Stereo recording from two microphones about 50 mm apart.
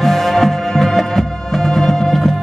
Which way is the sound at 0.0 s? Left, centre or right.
Centre.